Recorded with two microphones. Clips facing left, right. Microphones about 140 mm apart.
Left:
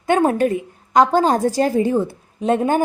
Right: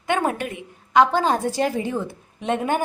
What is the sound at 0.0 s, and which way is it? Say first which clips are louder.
A woman's voice: left 7 dB; 35° left (ahead or behind).